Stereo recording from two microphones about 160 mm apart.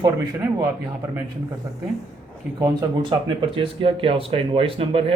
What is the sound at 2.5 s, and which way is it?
Speech, 25° right (ahead or behind).